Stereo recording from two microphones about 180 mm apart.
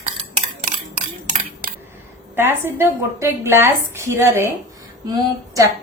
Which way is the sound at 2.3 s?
15° right (ahead or behind).